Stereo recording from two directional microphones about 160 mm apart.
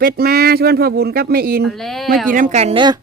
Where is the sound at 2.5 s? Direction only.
40° right (ahead or behind).